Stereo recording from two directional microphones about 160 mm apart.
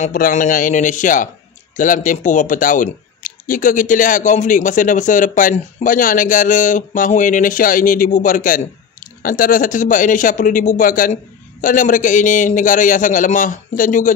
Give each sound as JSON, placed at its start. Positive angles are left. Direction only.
{"t": 0.0, "sound": "speech", "side_deg": 55}